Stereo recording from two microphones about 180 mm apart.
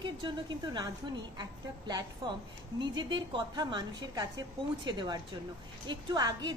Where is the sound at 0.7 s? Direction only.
25° right (ahead or behind).